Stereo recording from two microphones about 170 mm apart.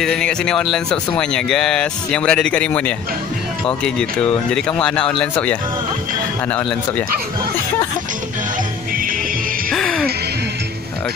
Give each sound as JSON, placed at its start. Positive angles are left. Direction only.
{"t": 0.0, "sound": "speech", "side_deg": 5}
{"t": 9.7, "sound": "music", "side_deg": 0}